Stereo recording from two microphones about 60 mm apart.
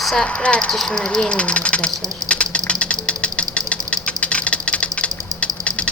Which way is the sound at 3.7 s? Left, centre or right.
Left.